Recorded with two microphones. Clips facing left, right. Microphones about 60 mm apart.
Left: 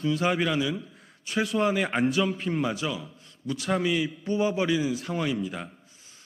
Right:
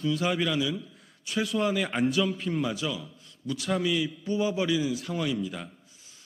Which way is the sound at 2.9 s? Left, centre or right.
Left.